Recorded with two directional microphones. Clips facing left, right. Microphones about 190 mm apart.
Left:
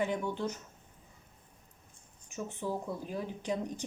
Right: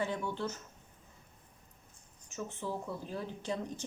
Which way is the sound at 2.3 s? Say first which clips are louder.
Left 2 dB; 15° left (ahead or behind).